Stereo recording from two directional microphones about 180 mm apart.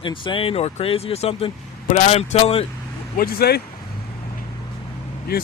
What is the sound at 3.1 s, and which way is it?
Speech, 55° left (ahead or behind).